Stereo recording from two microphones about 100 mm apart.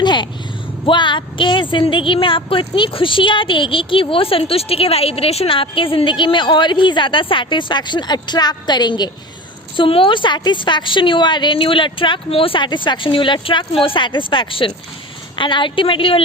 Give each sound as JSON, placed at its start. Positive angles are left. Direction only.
{"t": 0.0, "sound": "vehicle", "side_deg": 50}
{"t": 0.9, "sound": "a woman's voice", "side_deg": 55}
{"t": 9.7, "sound": "a woman's voice", "side_deg": 60}